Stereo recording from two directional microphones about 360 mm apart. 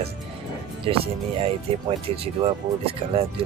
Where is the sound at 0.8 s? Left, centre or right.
Centre.